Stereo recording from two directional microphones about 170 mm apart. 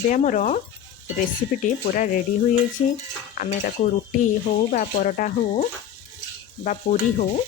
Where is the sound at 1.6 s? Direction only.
50° left (ahead or behind).